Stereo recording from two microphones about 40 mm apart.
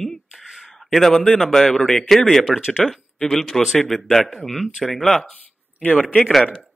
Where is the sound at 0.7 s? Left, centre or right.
Centre.